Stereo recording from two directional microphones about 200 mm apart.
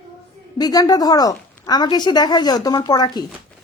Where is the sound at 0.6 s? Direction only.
20° left (ahead or behind).